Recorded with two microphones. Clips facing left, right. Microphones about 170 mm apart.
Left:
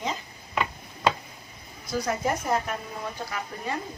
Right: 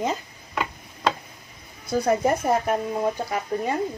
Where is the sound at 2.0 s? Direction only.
50° right (ahead or behind).